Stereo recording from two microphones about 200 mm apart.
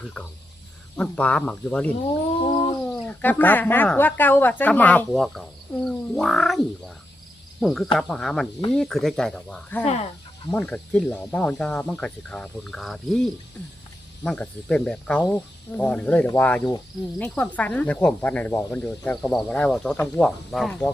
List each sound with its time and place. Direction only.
0.0 s cricket: 5° left (ahead or behind)
2.4 s cat: 25° left (ahead or behind)
3.1 s speech: 10° left (ahead or behind)
7.6 s cricket: centre (ahead or behind)
9.8 s speech: 30° left (ahead or behind)
10.5 s cricket: 10° left (ahead or behind)
14.3 s speech: 5° left (ahead or behind)
16.7 s cricket: 10° left (ahead or behind)